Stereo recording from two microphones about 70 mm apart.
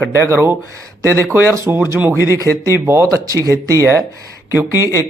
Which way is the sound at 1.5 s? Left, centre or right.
Right.